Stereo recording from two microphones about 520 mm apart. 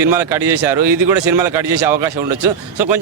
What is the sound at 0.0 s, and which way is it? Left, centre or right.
Speech, right.